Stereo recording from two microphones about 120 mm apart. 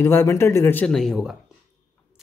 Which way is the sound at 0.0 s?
20° left (ahead or behind).